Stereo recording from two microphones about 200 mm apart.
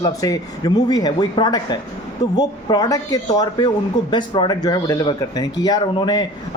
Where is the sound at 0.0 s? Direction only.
20° left (ahead or behind).